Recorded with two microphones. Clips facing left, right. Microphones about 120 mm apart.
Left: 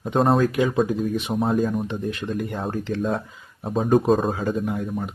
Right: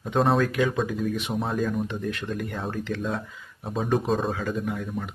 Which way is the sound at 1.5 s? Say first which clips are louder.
Left 2 dB; 40° left (ahead or behind).